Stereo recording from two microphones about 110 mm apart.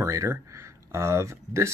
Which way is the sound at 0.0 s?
25° right (ahead or behind).